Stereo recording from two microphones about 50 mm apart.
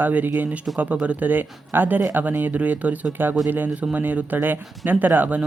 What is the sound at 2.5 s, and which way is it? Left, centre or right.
Speech, right.